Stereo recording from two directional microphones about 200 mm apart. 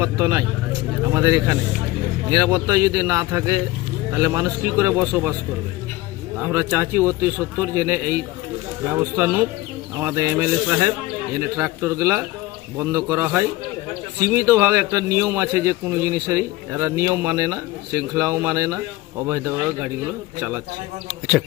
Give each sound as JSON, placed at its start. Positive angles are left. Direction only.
{"t": 0.0, "sound": "a man's voice", "side_deg": -15}
{"t": 6.4, "sound": "a man's voice", "side_deg": -10}